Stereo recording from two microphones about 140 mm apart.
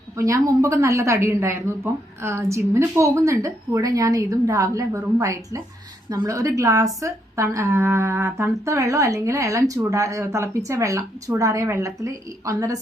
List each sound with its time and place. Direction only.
0.2 s speech: 20° right (ahead or behind)